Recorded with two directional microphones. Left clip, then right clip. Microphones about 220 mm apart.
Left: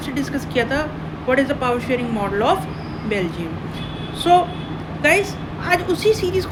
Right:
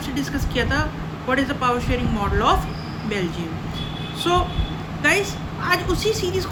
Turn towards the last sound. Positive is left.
turn(degrees=-15)  # may be behind; listen again after turning